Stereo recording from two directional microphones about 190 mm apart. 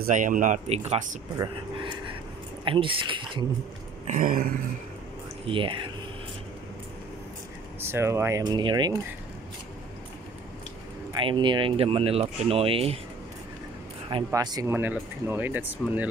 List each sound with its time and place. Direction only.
0.0 s speech: 45° right (ahead or behind)
1.4 s speech: 25° right (ahead or behind)
4.1 s speech: 45° right (ahead or behind)
5.5 s speech: 25° right (ahead or behind)
7.8 s speech: 15° right (ahead or behind)
11.1 s speech: 25° right (ahead or behind)
14.1 s speech: 20° right (ahead or behind)